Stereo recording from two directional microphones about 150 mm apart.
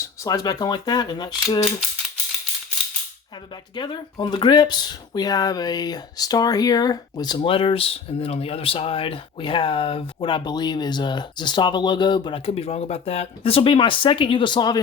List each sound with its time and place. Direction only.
0.2 s speech: 25° left (ahead or behind)
3.8 s speech: 30° left (ahead or behind)